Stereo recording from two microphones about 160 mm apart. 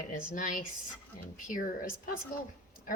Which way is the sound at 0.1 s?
55° left (ahead or behind).